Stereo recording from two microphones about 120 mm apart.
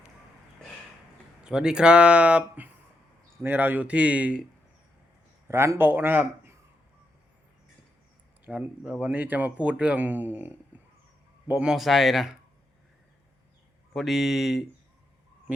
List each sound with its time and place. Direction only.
1.5 s speech: 5° right (ahead or behind)
5.5 s a man's voice: 20° right (ahead or behind)
8.4 s a man's voice: 10° right (ahead or behind)
13.9 s a man's voice: centre (ahead or behind)